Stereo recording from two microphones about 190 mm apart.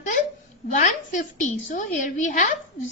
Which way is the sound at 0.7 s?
40° left (ahead or behind).